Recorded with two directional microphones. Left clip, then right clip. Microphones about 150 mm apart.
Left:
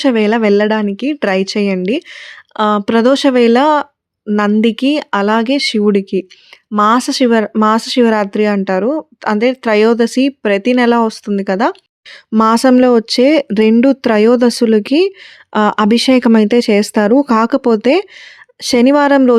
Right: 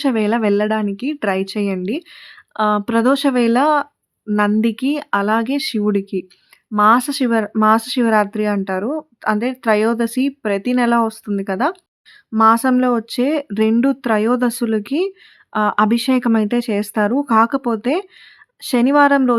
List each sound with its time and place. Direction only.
0.0 s speech: 30° left (ahead or behind)
12.4 s speech: 45° left (ahead or behind)